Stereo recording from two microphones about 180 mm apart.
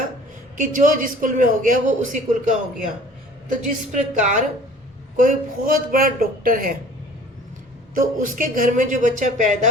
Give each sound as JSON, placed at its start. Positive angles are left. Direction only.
{"t": 0.5, "sound": "a man's voice", "side_deg": -45}
{"t": 3.9, "sound": "a man's voice", "side_deg": -45}
{"t": 7.9, "sound": "a man's voice", "side_deg": -50}